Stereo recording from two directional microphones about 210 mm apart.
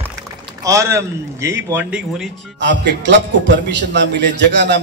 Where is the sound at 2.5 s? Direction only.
55° right (ahead or behind).